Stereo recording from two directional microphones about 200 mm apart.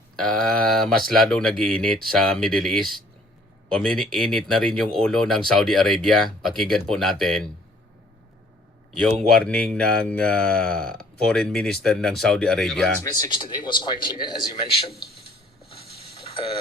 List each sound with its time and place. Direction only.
0.2 s speech: 5° left (ahead or behind)
9.1 s speech: 5° left (ahead or behind)
13.0 s speech: 20° left (ahead or behind)
15.7 s a sound: 30° left (ahead or behind)